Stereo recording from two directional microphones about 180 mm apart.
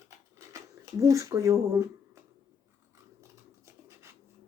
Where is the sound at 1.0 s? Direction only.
20° right (ahead or behind).